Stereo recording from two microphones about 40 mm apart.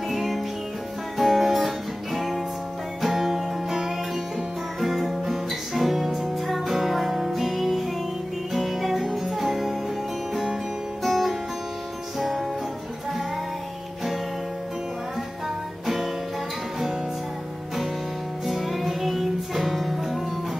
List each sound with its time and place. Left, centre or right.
0.1 s music: centre
18.5 s music: centre